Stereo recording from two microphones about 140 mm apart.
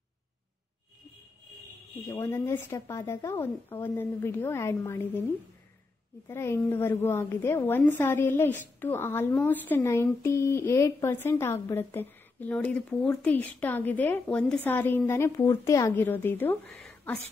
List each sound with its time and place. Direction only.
2.0 s a woman's voice: 20° left (ahead or behind)
6.2 s a woman's voice: 20° left (ahead or behind)